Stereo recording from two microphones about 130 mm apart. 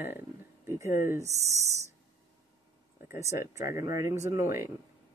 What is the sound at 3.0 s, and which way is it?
Speech, 20° right (ahead or behind).